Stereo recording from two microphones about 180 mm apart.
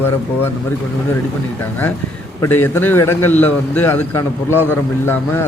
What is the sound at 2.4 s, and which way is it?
A man's voice, 10° left (ahead or behind).